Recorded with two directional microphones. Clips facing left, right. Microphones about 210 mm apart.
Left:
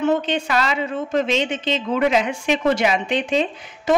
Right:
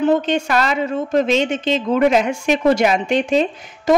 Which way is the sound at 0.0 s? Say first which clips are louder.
Right 4 dB; 40° right (ahead or behind).